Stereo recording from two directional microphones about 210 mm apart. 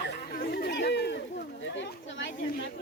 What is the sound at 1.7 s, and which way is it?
Snake, 60° left (ahead or behind).